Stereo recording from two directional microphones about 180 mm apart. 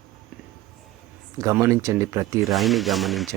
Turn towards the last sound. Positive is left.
turn(degrees=0)  # may be behind; listen again after turning